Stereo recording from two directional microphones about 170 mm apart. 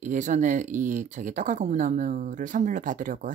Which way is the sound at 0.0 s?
45° right (ahead or behind).